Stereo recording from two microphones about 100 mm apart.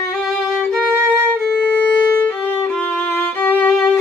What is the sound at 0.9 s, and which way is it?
Violin, 25° right (ahead or behind).